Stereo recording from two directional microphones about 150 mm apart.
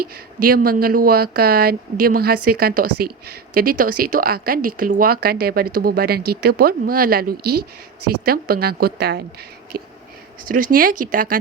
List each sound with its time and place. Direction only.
0.0 s a woman's voice: 80° right
10.5 s speech: 65° right (ahead or behind)